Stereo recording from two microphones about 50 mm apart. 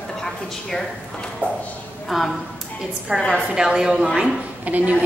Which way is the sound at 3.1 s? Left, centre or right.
Centre.